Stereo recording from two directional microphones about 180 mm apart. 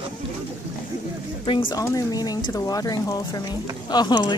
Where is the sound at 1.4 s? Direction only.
30° left (ahead or behind).